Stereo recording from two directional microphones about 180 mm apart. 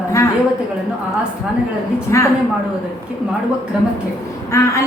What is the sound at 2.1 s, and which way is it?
Speech, 15° left (ahead or behind).